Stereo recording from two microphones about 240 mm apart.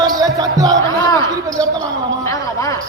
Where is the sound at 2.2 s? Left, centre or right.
Centre.